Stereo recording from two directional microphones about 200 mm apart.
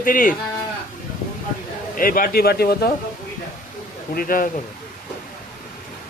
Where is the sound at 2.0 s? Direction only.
45° left (ahead or behind).